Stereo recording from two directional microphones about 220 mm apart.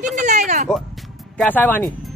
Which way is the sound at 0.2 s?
35° right (ahead or behind).